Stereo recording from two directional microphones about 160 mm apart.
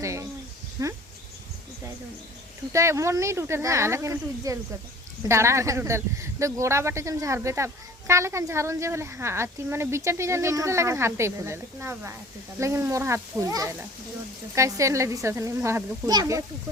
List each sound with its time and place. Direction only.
0.0 s a sound: 20° right (ahead or behind)
0.8 s speech: 20° right (ahead or behind)
2.7 s speech: 20° right (ahead or behind)